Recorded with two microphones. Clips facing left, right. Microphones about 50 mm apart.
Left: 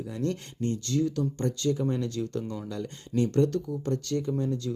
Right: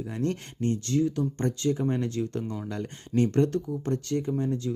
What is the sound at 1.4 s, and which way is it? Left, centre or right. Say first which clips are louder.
Speech: right 1 dB; right.